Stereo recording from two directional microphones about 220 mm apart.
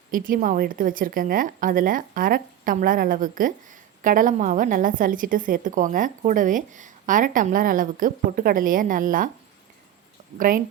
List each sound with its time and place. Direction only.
0.1 s a woman's voice: 40° right (ahead or behind)
10.3 s a woman's voice: 40° right (ahead or behind)